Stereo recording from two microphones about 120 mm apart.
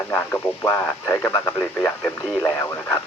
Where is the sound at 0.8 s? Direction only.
20° left (ahead or behind).